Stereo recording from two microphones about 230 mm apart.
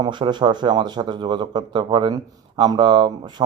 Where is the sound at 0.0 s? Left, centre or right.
Centre.